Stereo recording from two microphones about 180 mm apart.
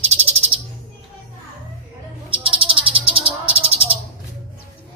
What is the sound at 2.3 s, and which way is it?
Music, 30° right (ahead or behind).